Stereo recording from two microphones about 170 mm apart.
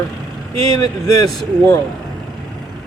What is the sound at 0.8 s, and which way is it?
A man's voice, 20° left (ahead or behind).